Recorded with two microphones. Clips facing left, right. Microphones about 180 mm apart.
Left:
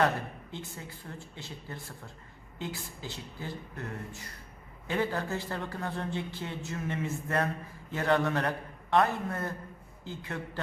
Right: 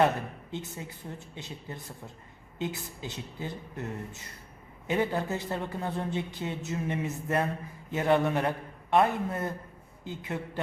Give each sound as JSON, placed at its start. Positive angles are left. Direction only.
{"t": 0.5, "sound": "speech", "side_deg": -20}